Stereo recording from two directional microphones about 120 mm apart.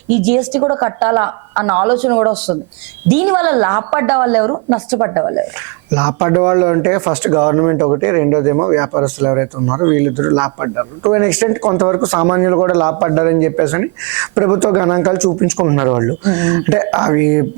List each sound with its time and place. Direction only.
0.1 s speech: 20° right (ahead or behind)